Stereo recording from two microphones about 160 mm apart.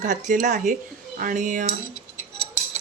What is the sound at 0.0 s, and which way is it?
Speech, 50° right (ahead or behind).